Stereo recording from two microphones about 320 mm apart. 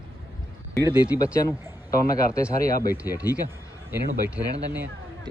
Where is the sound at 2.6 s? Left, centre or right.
Left.